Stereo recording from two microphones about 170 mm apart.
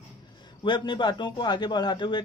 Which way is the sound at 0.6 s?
30° left (ahead or behind).